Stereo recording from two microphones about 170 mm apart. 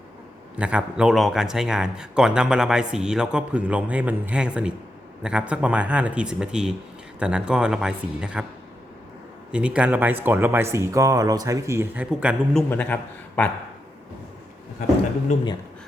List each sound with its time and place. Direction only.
0.5 s a man's voice: 5° right (ahead or behind)
9.5 s speech: 5° right (ahead or behind)
12.7 s speech: 10° left (ahead or behind)
15.3 s speech: 45° left (ahead or behind)